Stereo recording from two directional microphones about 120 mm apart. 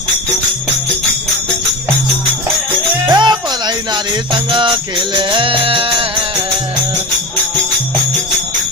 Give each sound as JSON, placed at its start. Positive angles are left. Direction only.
{"t": 3.1, "sound": "music", "side_deg": -40}